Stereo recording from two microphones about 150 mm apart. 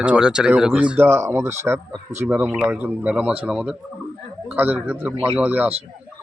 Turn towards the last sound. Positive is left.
turn(degrees=-10)  # may be behind; listen again after turning